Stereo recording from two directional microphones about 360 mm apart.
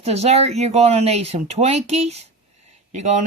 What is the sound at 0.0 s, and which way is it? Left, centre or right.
Speech, centre.